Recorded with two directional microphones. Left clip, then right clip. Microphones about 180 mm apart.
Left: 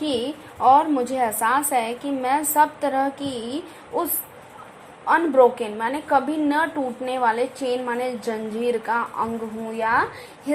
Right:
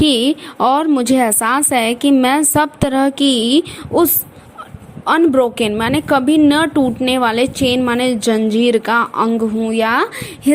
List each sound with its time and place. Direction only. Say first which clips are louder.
0.0 s a woman's voice: right 11 dB; 40° right (ahead or behind)
5.0 s a woman's voice: right 4 dB; 40° right (ahead or behind)